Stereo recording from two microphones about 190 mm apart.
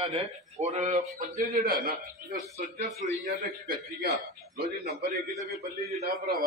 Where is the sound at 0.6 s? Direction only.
35° right (ahead or behind).